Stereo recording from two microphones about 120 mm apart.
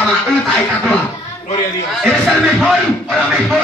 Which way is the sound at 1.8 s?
Centre (ahead or behind).